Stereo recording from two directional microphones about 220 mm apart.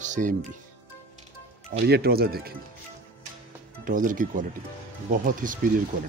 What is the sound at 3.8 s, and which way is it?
Speech, 35° right (ahead or behind).